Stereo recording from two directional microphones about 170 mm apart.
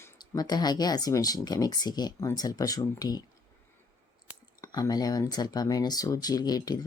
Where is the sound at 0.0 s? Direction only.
25° left (ahead or behind).